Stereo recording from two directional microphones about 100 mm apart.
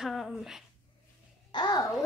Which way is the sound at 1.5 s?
45° left (ahead or behind).